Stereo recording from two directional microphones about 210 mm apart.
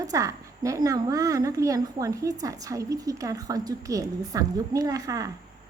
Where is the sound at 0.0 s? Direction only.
15° right (ahead or behind).